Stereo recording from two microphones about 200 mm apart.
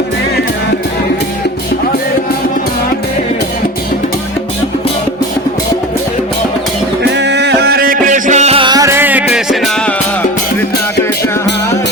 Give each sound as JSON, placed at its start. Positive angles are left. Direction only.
{"t": 7.2, "sound": "music", "side_deg": -60}